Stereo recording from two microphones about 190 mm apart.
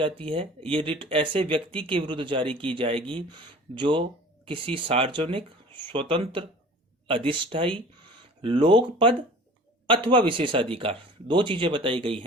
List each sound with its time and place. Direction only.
0.0 s speech: 25° right (ahead or behind)